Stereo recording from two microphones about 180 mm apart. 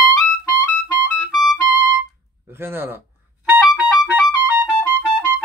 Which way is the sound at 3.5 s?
10° right (ahead or behind).